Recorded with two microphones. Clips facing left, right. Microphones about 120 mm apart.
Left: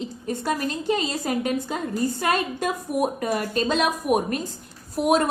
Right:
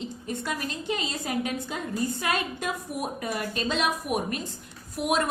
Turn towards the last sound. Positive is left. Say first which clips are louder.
# left 6 dB
turn(degrees=40)  # may be behind; listen again after turning